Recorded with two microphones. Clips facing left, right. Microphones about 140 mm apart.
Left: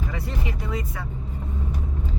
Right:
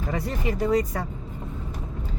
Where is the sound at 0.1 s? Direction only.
45° right (ahead or behind).